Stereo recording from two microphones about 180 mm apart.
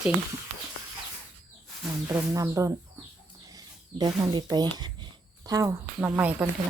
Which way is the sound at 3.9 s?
25° right (ahead or behind).